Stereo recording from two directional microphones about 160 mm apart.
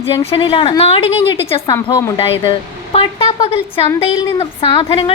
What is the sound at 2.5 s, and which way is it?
Speech, 35° left (ahead or behind).